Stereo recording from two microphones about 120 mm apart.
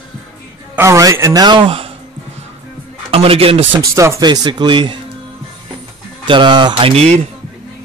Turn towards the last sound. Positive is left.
turn(degrees=-60)  # may be behind; listen again after turning